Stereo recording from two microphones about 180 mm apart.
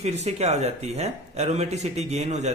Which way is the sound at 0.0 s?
35° right (ahead or behind).